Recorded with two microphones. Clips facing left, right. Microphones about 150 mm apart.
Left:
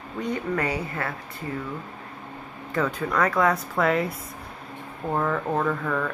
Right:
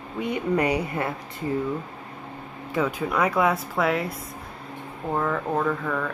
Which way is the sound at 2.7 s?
10° right (ahead or behind).